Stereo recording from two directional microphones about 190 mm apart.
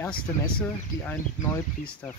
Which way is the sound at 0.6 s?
10° left (ahead or behind).